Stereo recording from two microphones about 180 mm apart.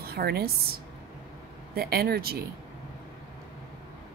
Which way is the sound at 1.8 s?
60° right (ahead or behind).